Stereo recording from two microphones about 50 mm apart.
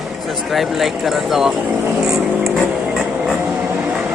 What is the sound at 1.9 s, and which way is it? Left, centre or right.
Vehicle, centre.